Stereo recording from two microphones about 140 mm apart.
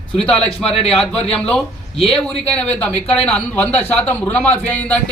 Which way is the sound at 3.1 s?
45° left (ahead or behind).